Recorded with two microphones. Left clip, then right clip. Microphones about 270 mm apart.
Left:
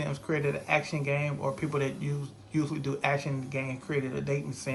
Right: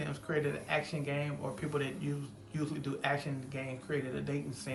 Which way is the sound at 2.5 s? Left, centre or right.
Left.